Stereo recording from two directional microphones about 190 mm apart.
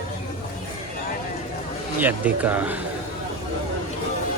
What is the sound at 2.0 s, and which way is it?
Speech, 10° right (ahead or behind).